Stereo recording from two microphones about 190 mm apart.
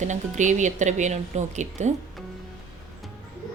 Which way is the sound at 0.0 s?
40° right (ahead or behind).